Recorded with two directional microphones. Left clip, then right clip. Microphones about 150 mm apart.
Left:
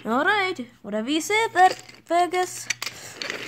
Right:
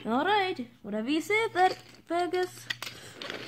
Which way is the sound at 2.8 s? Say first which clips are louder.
Left 8 dB; 50° left (ahead or behind).